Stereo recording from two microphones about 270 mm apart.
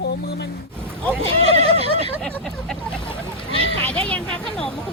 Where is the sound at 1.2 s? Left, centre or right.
Right.